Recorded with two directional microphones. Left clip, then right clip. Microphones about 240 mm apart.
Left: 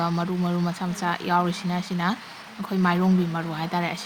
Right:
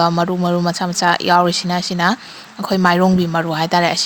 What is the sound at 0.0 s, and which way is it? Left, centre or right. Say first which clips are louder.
Speech: right 11 dB; right.